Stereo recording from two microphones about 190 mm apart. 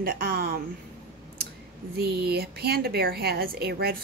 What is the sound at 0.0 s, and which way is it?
Speech, 50° right (ahead or behind).